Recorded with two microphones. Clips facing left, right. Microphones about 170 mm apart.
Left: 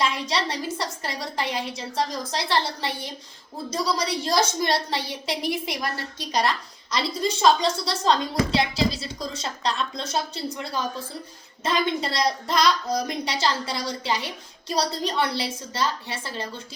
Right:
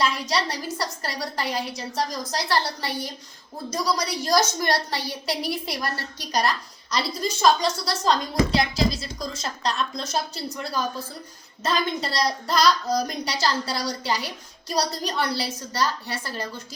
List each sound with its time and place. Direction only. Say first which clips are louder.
0.0 s a woman's voice: right 1 dB; 25° left (ahead or behind)
11.6 s a woman's voice: left 1 dB; 25° left (ahead or behind)